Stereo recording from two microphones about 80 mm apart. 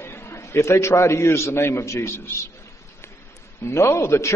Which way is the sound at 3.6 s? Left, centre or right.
Left.